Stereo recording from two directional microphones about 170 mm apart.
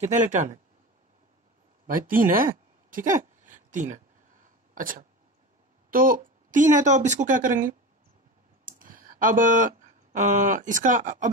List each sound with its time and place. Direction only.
0.0 s speech: 45° right (ahead or behind)
1.9 s a woman's voice: 55° right (ahead or behind)
8.7 s speech: 55° right (ahead or behind)